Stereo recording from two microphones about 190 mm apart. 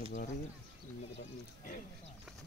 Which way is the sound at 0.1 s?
40° left (ahead or behind).